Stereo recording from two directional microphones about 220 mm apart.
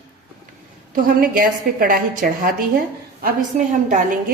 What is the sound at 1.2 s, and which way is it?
A woman's voice, 40° right (ahead or behind).